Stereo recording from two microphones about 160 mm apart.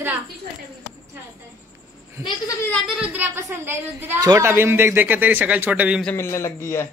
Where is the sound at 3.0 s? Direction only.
10° right (ahead or behind).